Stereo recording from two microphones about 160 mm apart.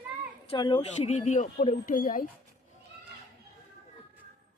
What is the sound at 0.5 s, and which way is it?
Speech, 30° left (ahead or behind).